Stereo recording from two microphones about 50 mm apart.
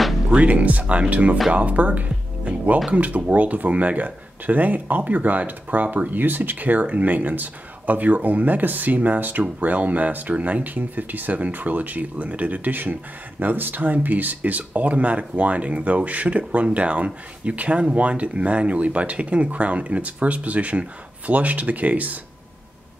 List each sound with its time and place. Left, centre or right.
0.3 s speech: right